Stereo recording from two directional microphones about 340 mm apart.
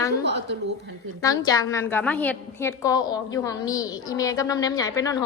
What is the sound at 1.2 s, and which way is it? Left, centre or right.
A woman's voice, centre.